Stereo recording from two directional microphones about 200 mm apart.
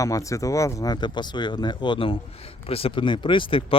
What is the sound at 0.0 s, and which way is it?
Speech, 15° left (ahead or behind).